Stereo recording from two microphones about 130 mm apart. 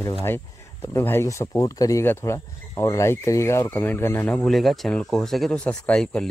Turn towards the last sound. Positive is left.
turn(degrees=5)  # may be behind; listen again after turning